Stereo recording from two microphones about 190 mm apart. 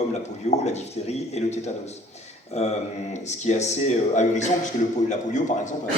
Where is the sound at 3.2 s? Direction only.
40° left (ahead or behind).